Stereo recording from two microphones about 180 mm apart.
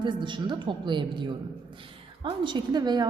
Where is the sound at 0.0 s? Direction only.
25° right (ahead or behind).